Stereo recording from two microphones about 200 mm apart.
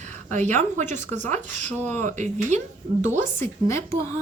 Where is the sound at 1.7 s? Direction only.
10° left (ahead or behind).